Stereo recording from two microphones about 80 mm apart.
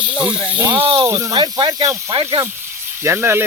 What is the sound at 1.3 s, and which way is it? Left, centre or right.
Speech, right.